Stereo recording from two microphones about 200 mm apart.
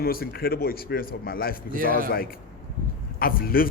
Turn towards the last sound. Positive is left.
turn(degrees=45)  # may be behind; listen again after turning